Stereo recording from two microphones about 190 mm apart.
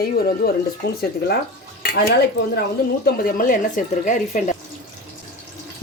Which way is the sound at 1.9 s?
55° left (ahead or behind).